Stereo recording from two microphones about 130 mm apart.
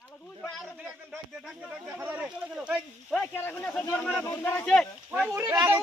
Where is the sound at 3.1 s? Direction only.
15° left (ahead or behind).